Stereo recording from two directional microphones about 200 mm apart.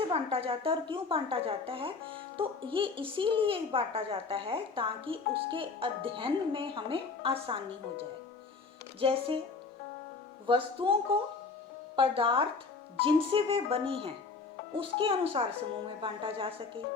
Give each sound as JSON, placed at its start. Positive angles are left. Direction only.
{"t": 0.1, "sound": "a woman's voice", "side_deg": -30}
{"t": 10.4, "sound": "a woman's voice", "side_deg": -25}